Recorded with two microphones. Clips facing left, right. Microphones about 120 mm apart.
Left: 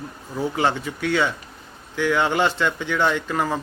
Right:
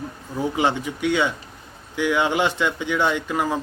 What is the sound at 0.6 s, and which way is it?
A man's voice, 15° right (ahead or behind).